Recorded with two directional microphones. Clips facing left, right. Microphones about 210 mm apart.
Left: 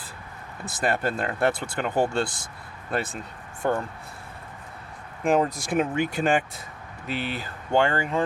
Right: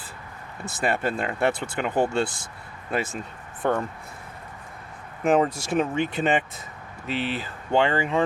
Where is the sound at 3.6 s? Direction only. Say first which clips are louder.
Right 1 dB; centre (ahead or behind).